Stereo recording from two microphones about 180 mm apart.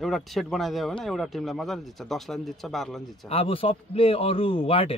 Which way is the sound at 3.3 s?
30° left (ahead or behind).